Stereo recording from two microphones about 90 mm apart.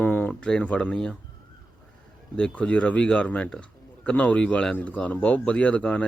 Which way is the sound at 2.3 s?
10° left (ahead or behind).